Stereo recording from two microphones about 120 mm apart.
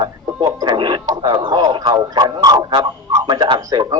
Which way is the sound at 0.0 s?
35° right (ahead or behind).